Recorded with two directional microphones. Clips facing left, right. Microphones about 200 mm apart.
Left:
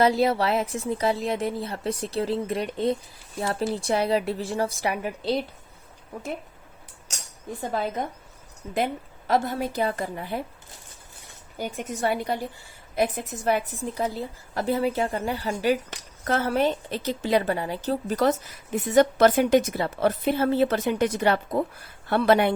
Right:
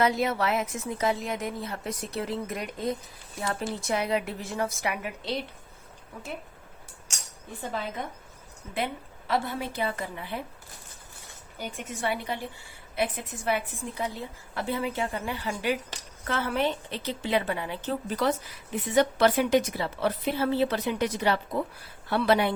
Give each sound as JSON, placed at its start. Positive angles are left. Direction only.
{"t": 0.0, "sound": "a woman's voice", "side_deg": 35}
{"t": 7.7, "sound": "a woman's voice", "side_deg": 45}
{"t": 11.5, "sound": "a woman's voice", "side_deg": 40}